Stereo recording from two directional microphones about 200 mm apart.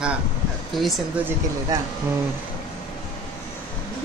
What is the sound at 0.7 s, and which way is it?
Speech, centre (ahead or behind).